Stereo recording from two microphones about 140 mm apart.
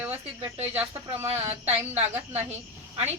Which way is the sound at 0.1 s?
45° right (ahead or behind).